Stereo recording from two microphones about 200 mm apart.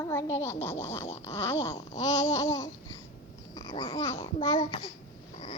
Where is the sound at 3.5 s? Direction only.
20° left (ahead or behind).